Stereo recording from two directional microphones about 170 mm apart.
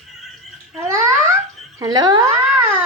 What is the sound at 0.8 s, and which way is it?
Babbling, 15° right (ahead or behind).